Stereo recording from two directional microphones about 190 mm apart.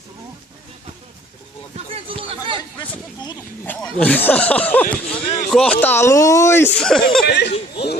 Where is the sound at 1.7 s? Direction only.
30° right (ahead or behind).